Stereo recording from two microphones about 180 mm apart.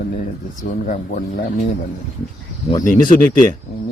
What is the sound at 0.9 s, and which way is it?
Speech, 45° left (ahead or behind).